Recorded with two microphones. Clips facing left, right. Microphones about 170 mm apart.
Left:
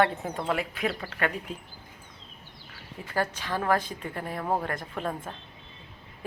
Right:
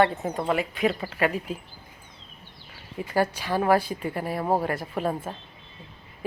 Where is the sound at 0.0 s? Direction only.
Centre (ahead or behind).